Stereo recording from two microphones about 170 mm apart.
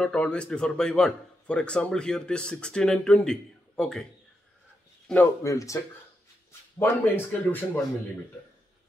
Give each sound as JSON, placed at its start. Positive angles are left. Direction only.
{"t": 0.0, "sound": "a man's voice", "side_deg": 5}
{"t": 5.0, "sound": "speech", "side_deg": 10}